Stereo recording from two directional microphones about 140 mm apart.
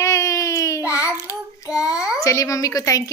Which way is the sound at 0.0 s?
25° left (ahead or behind).